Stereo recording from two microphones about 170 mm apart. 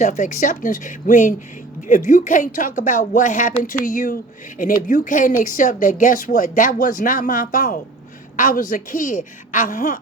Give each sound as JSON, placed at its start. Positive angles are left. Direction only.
{"t": 0.0, "sound": "speech", "side_deg": 45}